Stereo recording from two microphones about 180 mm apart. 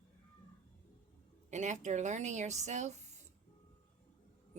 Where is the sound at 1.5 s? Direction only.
40° right (ahead or behind).